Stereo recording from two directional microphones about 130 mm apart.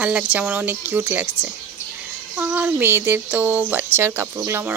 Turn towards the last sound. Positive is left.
turn(degrees=-20)  # may be behind; listen again after turning